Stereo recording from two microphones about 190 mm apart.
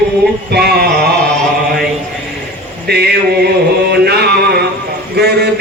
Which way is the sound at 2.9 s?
60° right (ahead or behind).